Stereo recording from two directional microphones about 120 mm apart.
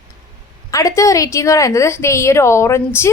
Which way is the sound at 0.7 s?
25° left (ahead or behind).